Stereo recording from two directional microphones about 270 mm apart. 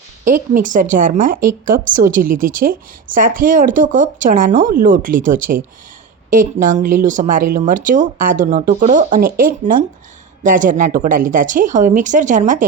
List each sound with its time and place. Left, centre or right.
0.5 s a woman's voice: right